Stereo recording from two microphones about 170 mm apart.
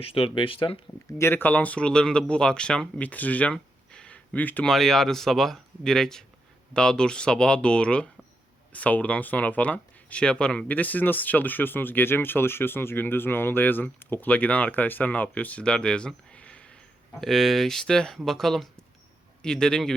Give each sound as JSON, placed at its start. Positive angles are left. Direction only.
{"t": 0.0, "sound": "speech", "side_deg": 35}
{"t": 1.2, "sound": "speech", "side_deg": 10}